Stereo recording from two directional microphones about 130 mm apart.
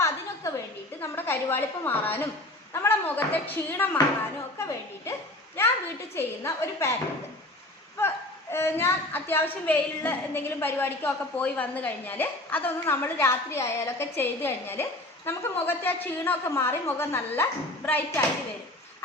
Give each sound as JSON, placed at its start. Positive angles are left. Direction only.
{"t": 0.0, "sound": "a sound", "side_deg": 25}
{"t": 1.0, "sound": "a woman's voice", "side_deg": 20}
{"t": 6.1, "sound": "a woman's voice", "side_deg": 20}
{"t": 7.9, "sound": "a woman's voice", "side_deg": 20}